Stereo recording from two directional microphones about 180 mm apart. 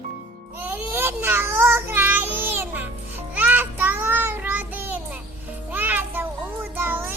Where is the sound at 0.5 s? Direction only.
10° right (ahead or behind).